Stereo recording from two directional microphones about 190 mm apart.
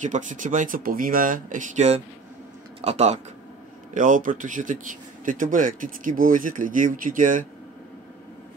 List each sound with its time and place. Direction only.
0.0 s speech: 40° right (ahead or behind)